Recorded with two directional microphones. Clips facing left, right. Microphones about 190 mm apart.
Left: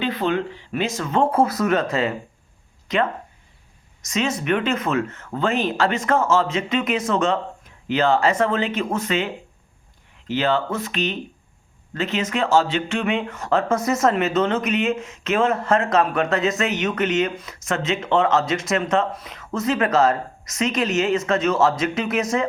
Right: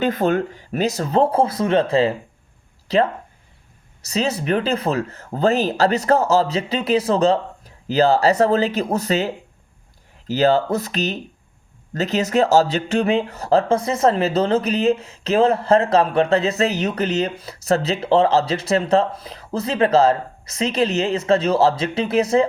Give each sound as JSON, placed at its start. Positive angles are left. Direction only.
{"t": 0.0, "sound": "speech", "side_deg": -45}